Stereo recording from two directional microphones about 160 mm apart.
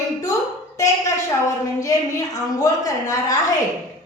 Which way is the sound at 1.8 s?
20° left (ahead or behind).